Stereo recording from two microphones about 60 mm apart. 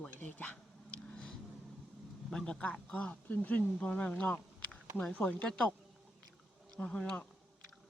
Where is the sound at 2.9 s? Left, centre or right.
Left.